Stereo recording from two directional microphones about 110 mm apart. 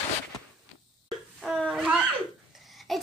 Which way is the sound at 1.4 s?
Centre (ahead or behind).